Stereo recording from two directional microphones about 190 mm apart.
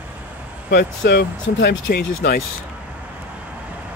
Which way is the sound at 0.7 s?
60° left (ahead or behind).